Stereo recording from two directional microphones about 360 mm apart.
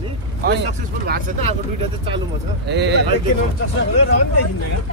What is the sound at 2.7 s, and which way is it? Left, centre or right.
Speech, right.